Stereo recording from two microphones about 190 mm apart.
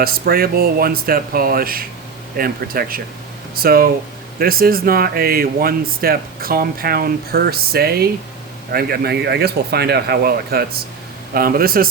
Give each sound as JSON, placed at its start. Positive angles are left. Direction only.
{"t": 0.0, "sound": "speech", "side_deg": -55}